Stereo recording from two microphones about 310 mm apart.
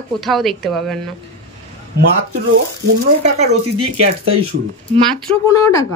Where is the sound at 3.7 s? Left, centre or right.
Right.